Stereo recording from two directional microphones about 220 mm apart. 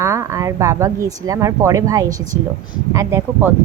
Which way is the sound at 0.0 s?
15° right (ahead or behind).